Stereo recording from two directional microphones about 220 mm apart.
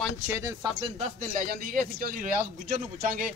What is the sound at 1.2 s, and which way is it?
Speech, 40° right (ahead or behind).